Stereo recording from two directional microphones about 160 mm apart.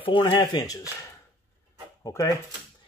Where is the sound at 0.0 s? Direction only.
30° left (ahead or behind).